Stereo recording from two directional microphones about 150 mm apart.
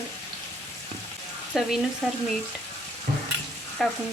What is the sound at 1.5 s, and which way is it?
Frying, centre (ahead or behind).